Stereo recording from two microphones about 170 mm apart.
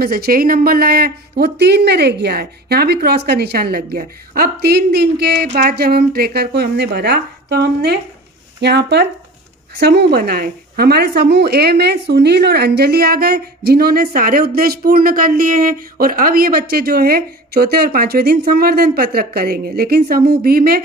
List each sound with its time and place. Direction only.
0.0 s speech: 65° right (ahead or behind)